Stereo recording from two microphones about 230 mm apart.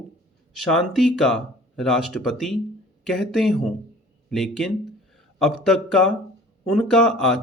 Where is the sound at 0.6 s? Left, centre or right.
Centre.